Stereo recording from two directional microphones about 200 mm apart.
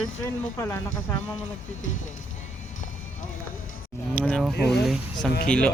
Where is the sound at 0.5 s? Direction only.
10° left (ahead or behind).